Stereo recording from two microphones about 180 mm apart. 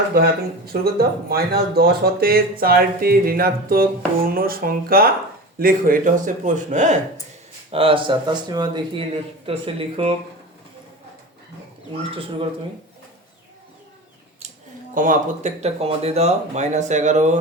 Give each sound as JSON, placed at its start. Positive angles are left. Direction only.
{"t": 0.1, "sound": "a man's voice", "side_deg": -55}
{"t": 7.7, "sound": "speech", "side_deg": -30}
{"t": 14.9, "sound": "speech", "side_deg": -45}